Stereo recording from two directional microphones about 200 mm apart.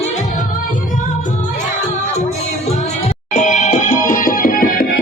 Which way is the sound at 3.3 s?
35° left (ahead or behind).